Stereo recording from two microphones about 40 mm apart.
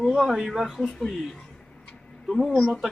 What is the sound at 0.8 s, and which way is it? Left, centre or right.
A man's voice, centre.